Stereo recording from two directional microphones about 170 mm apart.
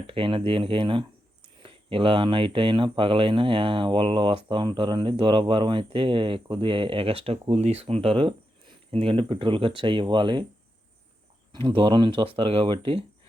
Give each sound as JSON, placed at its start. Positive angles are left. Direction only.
{"t": 0.1, "sound": "speech", "side_deg": -30}
{"t": 11.5, "sound": "speech", "side_deg": -30}